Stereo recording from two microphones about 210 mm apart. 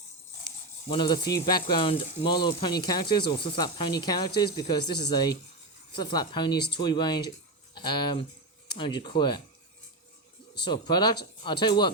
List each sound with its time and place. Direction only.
0.9 s speech: 20° left (ahead or behind)
10.6 s speech: 20° left (ahead or behind)